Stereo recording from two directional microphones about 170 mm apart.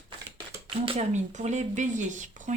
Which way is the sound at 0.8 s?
40° right (ahead or behind).